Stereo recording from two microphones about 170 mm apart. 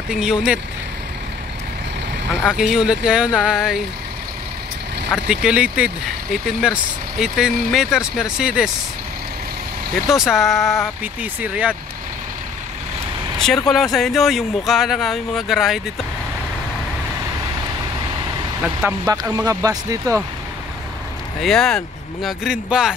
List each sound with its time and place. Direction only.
0.1 s speech: 5° right (ahead or behind)
2.4 s speech: 5° right (ahead or behind)
5.1 s speech: 5° right (ahead or behind)
10.0 s speech: centre (ahead or behind)
13.4 s speech: centre (ahead or behind)
18.6 s speech: 5° right (ahead or behind)
19.3 s speech: 20° right (ahead or behind)
21.4 s speech: centre (ahead or behind)